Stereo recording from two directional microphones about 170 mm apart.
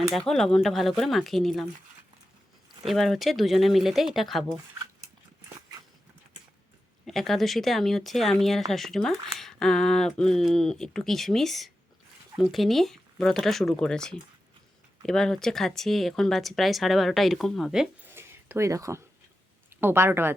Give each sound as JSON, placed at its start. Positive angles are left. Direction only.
{"t": 0.1, "sound": "speech", "side_deg": 0}
{"t": 2.8, "sound": "speech", "side_deg": 0}
{"t": 7.0, "sound": "speech", "side_deg": 0}
{"t": 18.1, "sound": "a sound", "side_deg": -15}
{"t": 19.7, "sound": "speech", "side_deg": -15}